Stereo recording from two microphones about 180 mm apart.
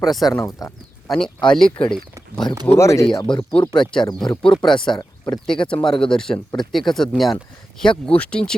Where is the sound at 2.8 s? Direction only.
15° left (ahead or behind).